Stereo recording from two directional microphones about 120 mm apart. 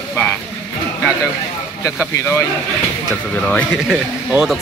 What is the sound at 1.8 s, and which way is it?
Speech, 25° left (ahead or behind).